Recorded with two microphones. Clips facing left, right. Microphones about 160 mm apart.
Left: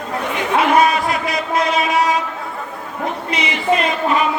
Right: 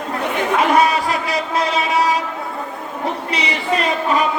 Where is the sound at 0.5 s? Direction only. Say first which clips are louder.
Left 1 dB; 35° right (ahead or behind).